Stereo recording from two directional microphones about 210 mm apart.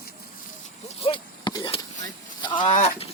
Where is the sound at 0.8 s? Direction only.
25° left (ahead or behind).